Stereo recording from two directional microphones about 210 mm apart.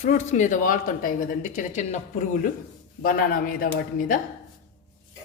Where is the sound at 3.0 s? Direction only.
45° left (ahead or behind).